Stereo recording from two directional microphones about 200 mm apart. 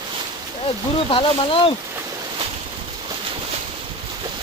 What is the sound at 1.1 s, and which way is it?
Speech, 25° left (ahead or behind).